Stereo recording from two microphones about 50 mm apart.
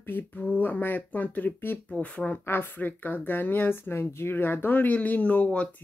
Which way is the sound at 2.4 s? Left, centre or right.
Left.